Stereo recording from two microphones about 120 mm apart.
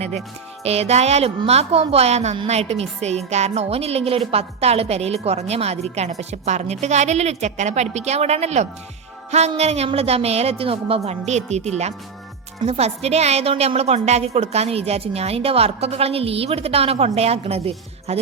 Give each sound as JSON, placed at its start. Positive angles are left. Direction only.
{"t": 0.6, "sound": "a woman's voice", "side_deg": -60}